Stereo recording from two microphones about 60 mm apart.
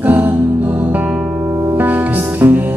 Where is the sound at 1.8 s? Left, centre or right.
Right.